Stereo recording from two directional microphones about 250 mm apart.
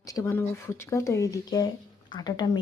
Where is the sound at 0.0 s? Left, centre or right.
Centre.